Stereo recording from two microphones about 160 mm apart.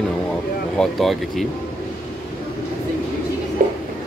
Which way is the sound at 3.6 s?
60° right (ahead or behind).